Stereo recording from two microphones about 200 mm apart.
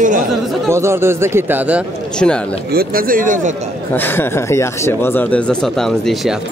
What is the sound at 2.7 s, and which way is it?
Speech, 45° right (ahead or behind).